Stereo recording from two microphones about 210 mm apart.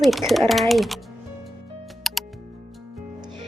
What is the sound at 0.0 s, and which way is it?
Speech, centre (ahead or behind).